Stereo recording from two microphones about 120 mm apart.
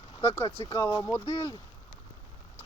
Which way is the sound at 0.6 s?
25° left (ahead or behind).